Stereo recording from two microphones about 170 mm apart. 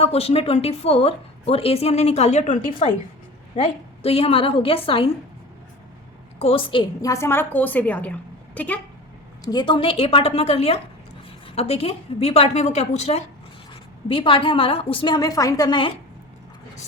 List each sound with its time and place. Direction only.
0.0 s a woman's voice: 35° left (ahead or behind)
6.4 s a woman's voice: 30° left (ahead or behind)
7.1 s a woman's voice: 15° left (ahead or behind)
9.4 s a woman's voice: 25° left (ahead or behind)